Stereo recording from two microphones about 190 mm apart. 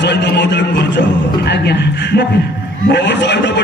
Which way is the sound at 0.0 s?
65° left (ahead or behind).